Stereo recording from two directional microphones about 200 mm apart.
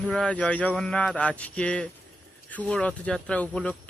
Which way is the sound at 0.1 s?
5° left (ahead or behind).